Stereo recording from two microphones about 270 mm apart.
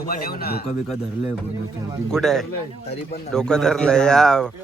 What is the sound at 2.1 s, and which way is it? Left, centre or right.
A man's voice, centre.